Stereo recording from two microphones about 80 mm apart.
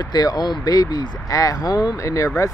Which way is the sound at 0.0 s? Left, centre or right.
Left.